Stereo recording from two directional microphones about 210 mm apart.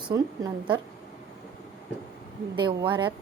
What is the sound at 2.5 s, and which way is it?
Speech, 20° right (ahead or behind).